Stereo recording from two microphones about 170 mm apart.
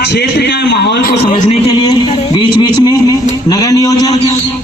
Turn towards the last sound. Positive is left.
turn(degrees=20)  # may be behind; listen again after turning